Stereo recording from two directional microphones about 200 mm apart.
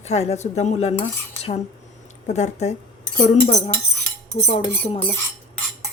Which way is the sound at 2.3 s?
35° left (ahead or behind).